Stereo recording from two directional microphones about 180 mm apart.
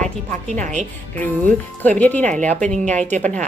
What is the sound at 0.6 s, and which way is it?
Speech, 40° right (ahead or behind).